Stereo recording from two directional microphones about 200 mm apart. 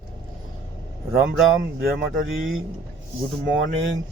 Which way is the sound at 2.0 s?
65° right (ahead or behind).